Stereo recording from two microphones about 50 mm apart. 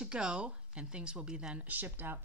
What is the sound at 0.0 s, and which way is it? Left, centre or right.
Speech, centre.